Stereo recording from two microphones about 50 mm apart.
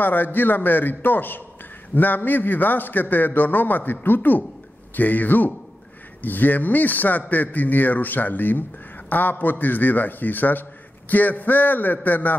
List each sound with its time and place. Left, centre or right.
0.0 s a man's voice: left